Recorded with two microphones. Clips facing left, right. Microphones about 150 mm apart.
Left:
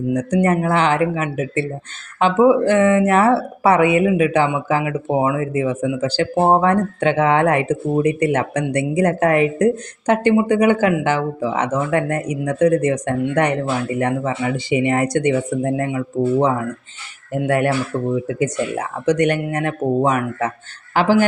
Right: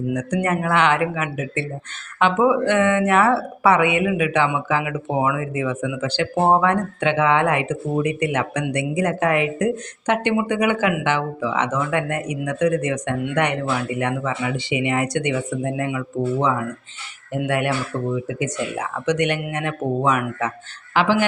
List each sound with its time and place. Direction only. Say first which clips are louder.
0.1 s speech: left 6 dB; 30° left (ahead or behind)